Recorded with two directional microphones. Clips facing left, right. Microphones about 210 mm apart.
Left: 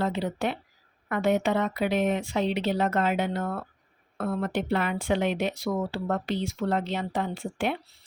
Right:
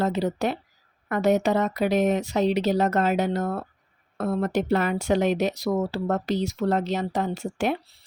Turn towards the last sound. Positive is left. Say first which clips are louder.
# right 3 dB
turn(degrees=-40)  # may be behind; listen again after turning